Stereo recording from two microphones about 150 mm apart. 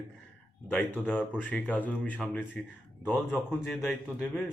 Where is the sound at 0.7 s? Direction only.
10° left (ahead or behind).